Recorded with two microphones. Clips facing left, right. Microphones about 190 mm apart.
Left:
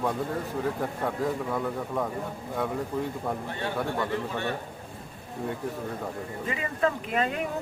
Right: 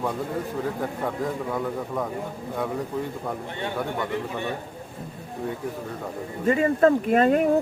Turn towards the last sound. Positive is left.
turn(degrees=-45)  # may be behind; listen again after turning